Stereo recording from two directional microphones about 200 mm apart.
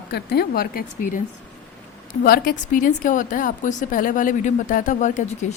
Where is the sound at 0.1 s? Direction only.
55° left (ahead or behind).